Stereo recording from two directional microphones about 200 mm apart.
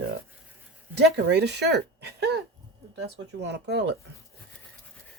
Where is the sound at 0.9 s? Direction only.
60° right (ahead or behind).